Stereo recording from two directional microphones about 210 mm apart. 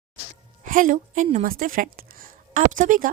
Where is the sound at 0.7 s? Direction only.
40° right (ahead or behind).